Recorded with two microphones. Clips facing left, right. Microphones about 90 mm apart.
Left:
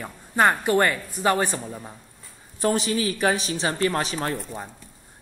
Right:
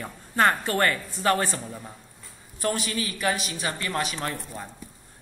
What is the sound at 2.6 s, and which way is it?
A man's voice, 30° left (ahead or behind).